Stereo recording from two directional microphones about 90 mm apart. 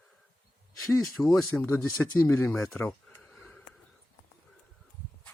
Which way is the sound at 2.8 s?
25° left (ahead or behind).